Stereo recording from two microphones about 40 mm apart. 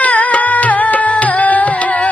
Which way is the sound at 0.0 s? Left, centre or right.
Left.